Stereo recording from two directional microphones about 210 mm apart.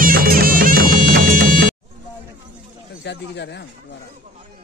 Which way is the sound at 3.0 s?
55° left (ahead or behind).